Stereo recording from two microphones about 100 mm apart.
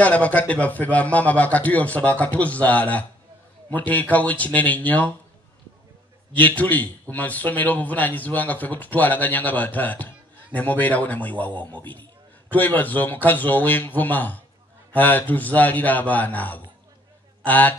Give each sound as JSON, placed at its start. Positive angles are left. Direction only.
{"t": 0.0, "sound": "a man's voice", "side_deg": 15}
{"t": 6.3, "sound": "a man's voice", "side_deg": 15}